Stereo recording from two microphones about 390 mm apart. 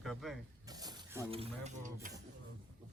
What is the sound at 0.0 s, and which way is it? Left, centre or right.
Mechanisms, centre.